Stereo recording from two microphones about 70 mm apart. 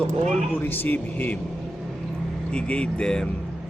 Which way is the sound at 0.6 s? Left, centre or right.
Left.